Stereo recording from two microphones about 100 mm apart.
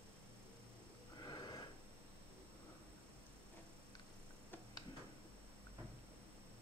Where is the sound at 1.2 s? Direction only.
45° left (ahead or behind).